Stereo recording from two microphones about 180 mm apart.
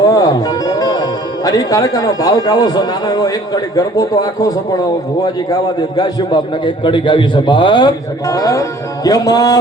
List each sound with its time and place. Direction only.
0.0 s music: 20° left (ahead or behind)
1.5 s a man's voice: 20° left (ahead or behind)
6.0 s a man's voice: 25° left (ahead or behind)